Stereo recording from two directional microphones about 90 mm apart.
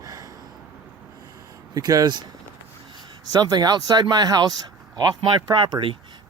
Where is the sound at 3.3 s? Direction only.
45° right (ahead or behind).